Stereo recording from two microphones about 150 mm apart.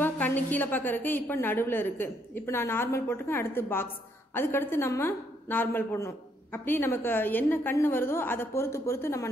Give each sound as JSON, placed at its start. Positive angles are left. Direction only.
{"t": 0.0, "sound": "a woman's voice", "side_deg": 10}